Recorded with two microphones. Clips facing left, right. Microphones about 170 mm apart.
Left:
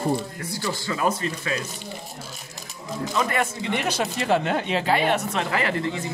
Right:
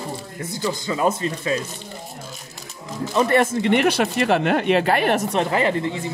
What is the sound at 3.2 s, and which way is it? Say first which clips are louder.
Speech: right 7 dB; 35° right (ahead or behind).